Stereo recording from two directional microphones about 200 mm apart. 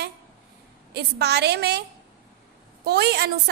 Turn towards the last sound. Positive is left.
turn(degrees=-55)  # may be behind; listen again after turning